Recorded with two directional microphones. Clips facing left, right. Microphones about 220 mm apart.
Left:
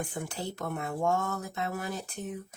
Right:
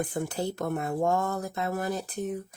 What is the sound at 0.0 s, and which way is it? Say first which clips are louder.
Speech: right 6 dB; 40° right (ahead or behind).